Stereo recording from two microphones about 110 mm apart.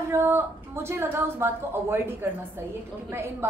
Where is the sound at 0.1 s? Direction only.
25° right (ahead or behind).